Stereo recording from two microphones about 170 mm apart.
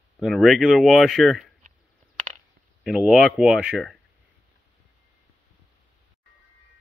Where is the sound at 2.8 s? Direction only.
Centre (ahead or behind).